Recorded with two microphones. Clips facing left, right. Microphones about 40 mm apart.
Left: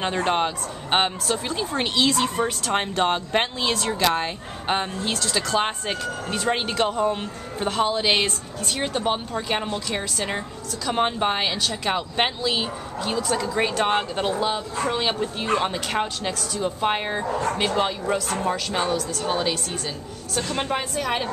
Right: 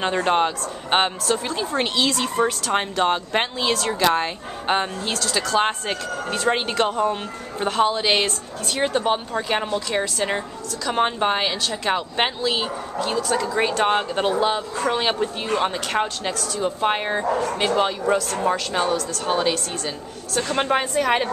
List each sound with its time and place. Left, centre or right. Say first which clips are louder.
0.0 s speech: right 3 dB; centre
14.9 s speech: right 4 dB; centre
20.4 s a woman's voice: right 6 dB; right